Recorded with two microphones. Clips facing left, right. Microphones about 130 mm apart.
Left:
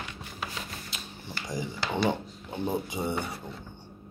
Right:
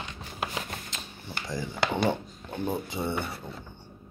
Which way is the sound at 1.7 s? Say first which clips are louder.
Right 2 dB; 55° right (ahead or behind).